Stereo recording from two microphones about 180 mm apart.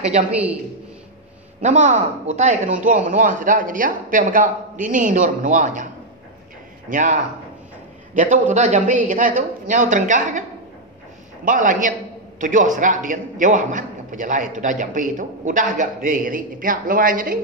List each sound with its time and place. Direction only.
1.6 s a man's voice: 40° right (ahead or behind)
6.9 s a man's voice: 45° right (ahead or behind)
11.4 s a man's voice: 45° right (ahead or behind)